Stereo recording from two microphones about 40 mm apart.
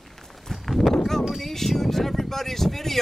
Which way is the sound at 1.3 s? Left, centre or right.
Centre.